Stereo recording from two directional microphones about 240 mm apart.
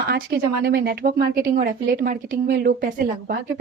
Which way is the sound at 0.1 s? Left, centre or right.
Right.